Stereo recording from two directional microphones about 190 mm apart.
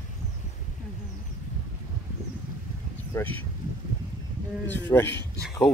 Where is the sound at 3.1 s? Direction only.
10° left (ahead or behind).